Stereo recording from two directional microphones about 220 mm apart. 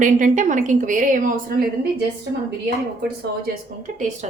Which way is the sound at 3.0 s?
45° right (ahead or behind).